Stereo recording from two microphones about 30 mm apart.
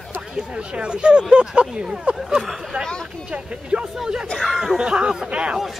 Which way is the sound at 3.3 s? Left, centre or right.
Right.